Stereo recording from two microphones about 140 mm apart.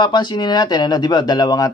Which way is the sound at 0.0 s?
30° left (ahead or behind).